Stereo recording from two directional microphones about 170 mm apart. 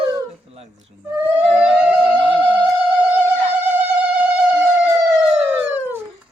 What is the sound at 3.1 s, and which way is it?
Insect, 10° right (ahead or behind).